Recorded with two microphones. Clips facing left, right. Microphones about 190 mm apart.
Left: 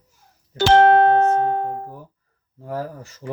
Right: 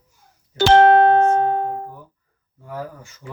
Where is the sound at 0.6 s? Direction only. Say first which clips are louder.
Right 1 dB; 80° right.